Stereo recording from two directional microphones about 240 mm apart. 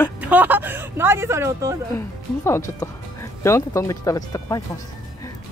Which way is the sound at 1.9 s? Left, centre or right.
Centre.